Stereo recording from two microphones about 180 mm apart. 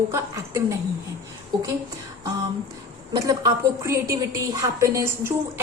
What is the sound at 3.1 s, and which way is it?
A woman's voice, 20° right (ahead or behind).